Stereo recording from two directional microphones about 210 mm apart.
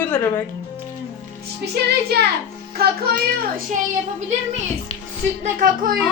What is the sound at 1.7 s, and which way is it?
Speech, 50° right (ahead or behind).